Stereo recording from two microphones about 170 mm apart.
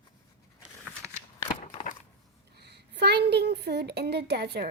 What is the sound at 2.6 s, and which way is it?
A woman's voice, 75° right (ahead or behind).